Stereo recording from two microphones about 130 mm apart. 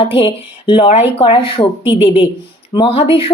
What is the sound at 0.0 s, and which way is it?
Speech, 45° left (ahead or behind).